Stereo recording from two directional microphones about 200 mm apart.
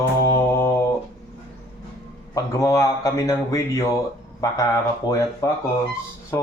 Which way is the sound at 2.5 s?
15° left (ahead or behind).